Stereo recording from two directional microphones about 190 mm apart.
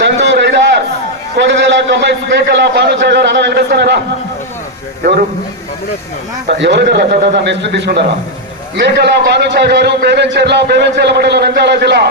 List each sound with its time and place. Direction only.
0.0 s a sound: 65° right (ahead or behind)
1.4 s a man's voice: 65° right (ahead or behind)
6.5 s a man's voice: 65° right (ahead or behind)